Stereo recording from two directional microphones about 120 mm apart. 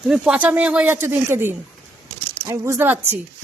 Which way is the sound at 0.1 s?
10° right (ahead or behind).